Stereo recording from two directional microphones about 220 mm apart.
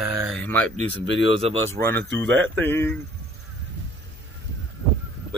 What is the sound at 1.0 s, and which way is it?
Speech, 25° right (ahead or behind).